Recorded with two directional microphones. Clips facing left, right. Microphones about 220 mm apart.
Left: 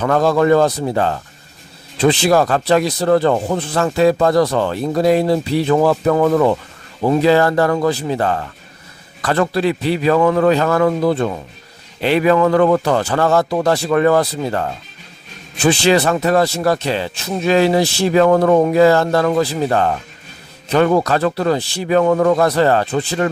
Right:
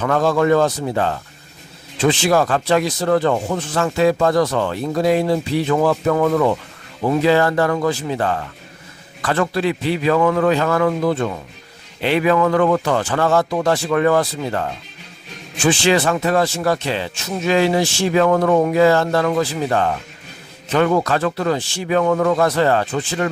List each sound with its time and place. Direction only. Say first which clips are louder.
0.0 s speech: left 2 dB; 40° left (ahead or behind)
15.6 s speech: left 2 dB; 40° left (ahead or behind)